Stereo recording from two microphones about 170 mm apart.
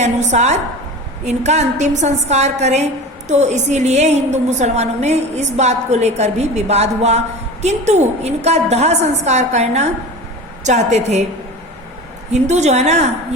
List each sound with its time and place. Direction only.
0.0 s a woman's voice: 45° right (ahead or behind)
12.3 s a woman's voice: 40° right (ahead or behind)